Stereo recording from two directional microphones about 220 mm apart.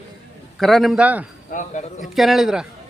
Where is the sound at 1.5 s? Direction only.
35° left (ahead or behind).